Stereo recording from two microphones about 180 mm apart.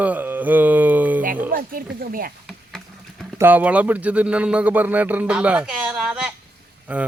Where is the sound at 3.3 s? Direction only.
10° right (ahead or behind).